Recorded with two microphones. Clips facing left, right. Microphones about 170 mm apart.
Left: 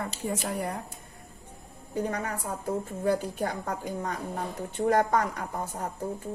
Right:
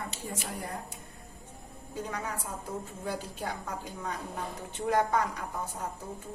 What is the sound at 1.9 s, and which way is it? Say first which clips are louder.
A woman's voice: left 6 dB; 55° left (ahead or behind).